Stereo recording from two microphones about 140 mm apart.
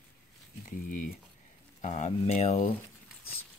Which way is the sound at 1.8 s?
55° left (ahead or behind).